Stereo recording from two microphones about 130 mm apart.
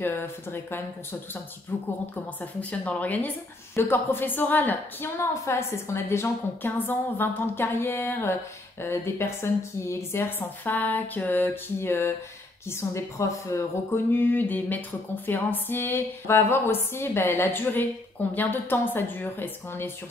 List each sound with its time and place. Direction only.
0.0 s a woman's voice: 15° left (ahead or behind)